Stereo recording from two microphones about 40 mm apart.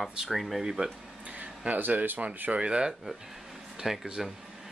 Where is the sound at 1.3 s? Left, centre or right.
Right.